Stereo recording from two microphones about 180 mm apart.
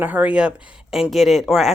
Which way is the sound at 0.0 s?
10° right (ahead or behind).